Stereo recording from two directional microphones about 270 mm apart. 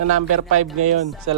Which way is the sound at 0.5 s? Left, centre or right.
Right.